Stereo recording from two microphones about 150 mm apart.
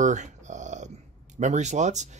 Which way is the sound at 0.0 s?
55° right (ahead or behind).